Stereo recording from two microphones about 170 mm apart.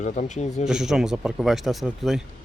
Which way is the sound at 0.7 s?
5° right (ahead or behind).